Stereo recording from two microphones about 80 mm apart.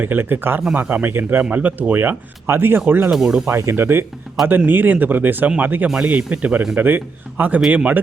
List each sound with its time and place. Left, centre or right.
0.0 s speech: right
3.1 s speech: centre
3.4 s speech: right; by 7.9 s centre